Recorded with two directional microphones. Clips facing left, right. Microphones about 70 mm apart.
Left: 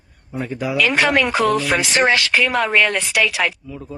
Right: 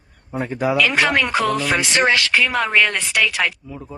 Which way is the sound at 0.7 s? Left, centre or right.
Centre.